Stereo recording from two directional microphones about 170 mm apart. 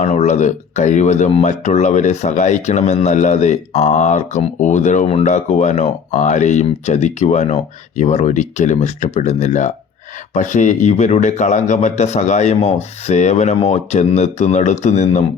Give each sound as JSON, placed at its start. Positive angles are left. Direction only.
{"t": 0.0, "sound": "speech", "side_deg": 45}